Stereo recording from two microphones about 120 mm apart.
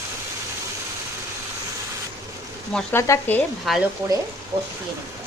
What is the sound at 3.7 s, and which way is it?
Speech, centre (ahead or behind).